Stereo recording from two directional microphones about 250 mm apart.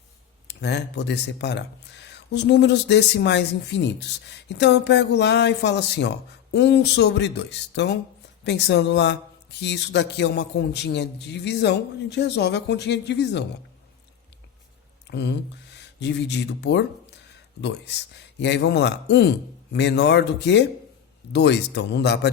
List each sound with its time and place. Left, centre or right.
0.4 s speech: left
15.1 s speech: left